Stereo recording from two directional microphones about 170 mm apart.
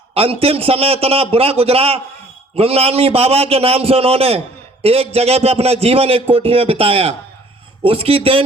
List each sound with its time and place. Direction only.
0.1 s a man's voice: 35° right (ahead or behind)